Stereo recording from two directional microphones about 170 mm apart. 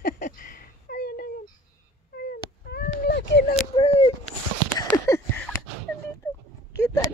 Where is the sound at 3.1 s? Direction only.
90° left.